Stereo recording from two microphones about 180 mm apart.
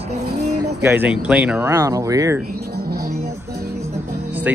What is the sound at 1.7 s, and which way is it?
Speech, 15° right (ahead or behind).